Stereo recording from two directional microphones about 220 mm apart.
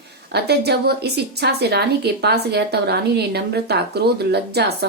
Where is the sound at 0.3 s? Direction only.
45° right (ahead or behind).